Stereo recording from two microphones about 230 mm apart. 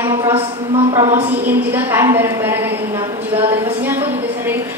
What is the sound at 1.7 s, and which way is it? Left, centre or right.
A woman's voice, centre.